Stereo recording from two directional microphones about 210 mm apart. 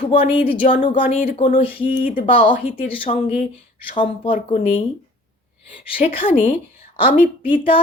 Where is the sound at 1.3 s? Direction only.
25° left (ahead or behind).